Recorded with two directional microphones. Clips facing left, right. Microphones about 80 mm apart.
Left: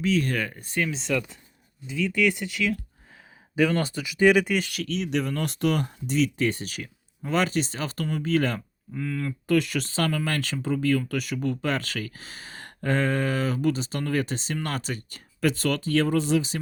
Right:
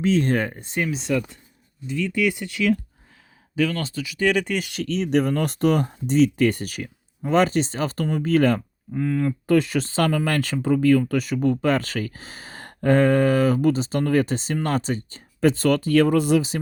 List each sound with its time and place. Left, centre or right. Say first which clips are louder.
0.0 s speech: right 4 dB; right
0.9 s speech: right 3 dB; centre
3.6 s speech: even; left
4.4 s speech: left 1 dB; centre
4.7 s speech: right 6 dB; right
9.0 s speech: right 7 dB; right
9.5 s speech: right 3 dB; right